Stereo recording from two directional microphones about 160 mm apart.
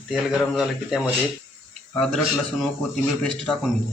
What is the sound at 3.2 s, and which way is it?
Speech, 5° left (ahead or behind).